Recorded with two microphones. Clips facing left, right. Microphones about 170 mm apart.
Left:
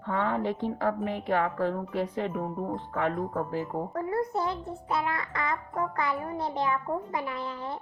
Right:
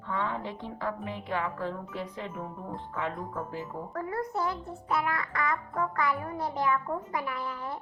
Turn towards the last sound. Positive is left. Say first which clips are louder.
# left 1 dB
turn(degrees=25)  # may be behind; listen again after turning